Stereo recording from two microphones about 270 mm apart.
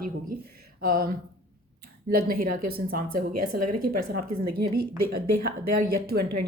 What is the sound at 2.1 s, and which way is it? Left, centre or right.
Speech, right.